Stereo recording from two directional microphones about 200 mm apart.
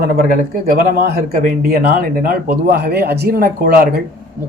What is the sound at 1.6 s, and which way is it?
Speech, 45° right (ahead or behind).